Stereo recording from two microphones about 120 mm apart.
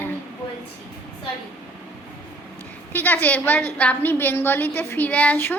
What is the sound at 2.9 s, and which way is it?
A woman's voice, 15° left (ahead or behind).